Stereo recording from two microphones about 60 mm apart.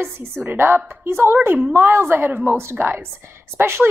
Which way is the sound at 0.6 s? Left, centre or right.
Right.